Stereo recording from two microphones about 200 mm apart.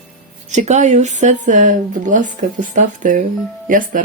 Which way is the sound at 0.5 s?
35° right (ahead or behind).